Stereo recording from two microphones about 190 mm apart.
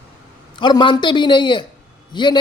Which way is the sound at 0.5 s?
25° left (ahead or behind).